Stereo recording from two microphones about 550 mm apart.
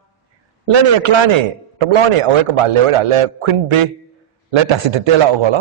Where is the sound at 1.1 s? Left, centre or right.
Right.